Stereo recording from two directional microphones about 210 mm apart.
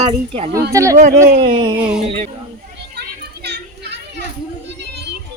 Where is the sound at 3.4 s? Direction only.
50° right (ahead or behind).